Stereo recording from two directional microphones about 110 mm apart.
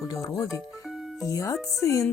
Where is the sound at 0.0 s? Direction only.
30° left (ahead or behind).